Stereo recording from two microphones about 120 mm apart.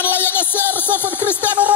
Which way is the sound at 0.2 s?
15° left (ahead or behind).